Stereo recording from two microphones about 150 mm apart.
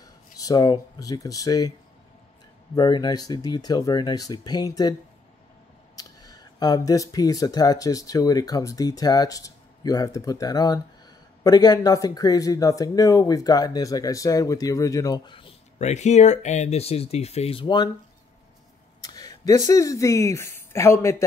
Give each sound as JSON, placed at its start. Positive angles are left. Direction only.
{"t": 0.0, "sound": "speech", "side_deg": 25}
{"t": 2.7, "sound": "speech", "side_deg": 30}
{"t": 5.9, "sound": "speech", "side_deg": 25}
{"t": 15.8, "sound": "speech", "side_deg": 50}
{"t": 19.0, "sound": "speech", "side_deg": 25}